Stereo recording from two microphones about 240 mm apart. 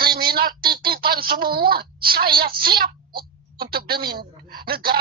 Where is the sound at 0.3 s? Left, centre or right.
Right.